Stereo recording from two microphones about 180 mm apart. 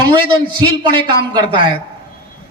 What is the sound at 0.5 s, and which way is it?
Speech, 25° right (ahead or behind).